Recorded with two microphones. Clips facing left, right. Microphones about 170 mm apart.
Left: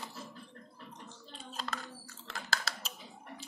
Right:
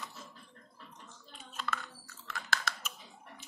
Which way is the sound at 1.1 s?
30° left (ahead or behind).